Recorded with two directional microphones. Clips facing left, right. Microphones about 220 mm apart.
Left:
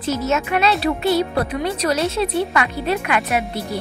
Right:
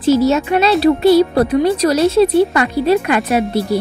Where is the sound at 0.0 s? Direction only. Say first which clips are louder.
Right 9 dB; 30° right (ahead or behind).